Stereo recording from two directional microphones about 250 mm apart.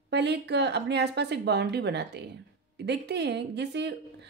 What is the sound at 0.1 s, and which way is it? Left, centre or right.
Speech, right.